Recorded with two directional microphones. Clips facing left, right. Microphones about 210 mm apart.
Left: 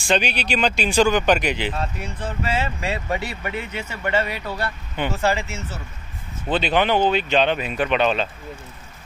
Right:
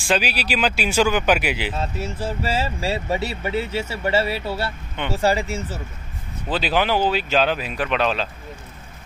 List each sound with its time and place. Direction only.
0.0 s speech: centre (ahead or behind)
2.2 s speech: 30° right (ahead or behind)
4.5 s speech: 5° right (ahead or behind)
5.1 s speech: 35° right (ahead or behind)
6.5 s speech: 5° right (ahead or behind)